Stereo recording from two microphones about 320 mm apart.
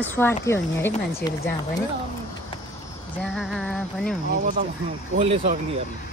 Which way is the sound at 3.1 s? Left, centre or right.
Centre.